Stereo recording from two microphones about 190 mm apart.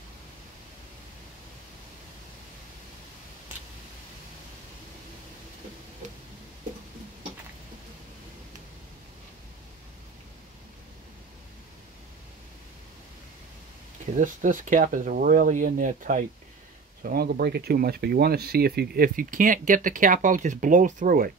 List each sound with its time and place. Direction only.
14.1 s speech: 45° right (ahead or behind)